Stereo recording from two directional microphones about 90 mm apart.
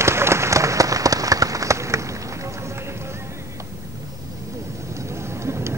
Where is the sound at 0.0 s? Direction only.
30° right (ahead or behind).